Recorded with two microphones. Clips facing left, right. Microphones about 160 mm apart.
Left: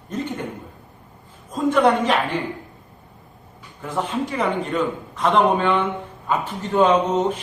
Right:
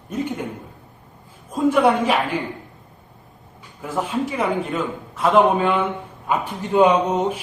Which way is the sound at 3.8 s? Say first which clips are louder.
Right 1 dB; 5° right (ahead or behind).